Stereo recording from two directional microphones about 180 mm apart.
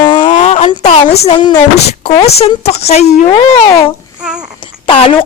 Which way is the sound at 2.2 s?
35° left (ahead or behind).